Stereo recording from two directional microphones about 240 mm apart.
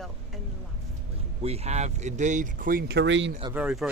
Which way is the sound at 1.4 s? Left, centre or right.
Right.